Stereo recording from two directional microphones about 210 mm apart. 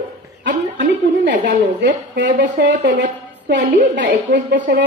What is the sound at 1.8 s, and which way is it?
A woman's voice, 55° right (ahead or behind).